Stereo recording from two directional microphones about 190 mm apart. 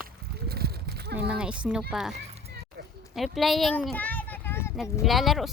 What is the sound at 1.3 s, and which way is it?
Speech, 5° right (ahead or behind).